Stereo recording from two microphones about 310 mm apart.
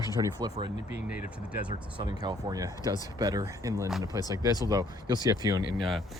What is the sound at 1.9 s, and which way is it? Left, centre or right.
Speech, centre.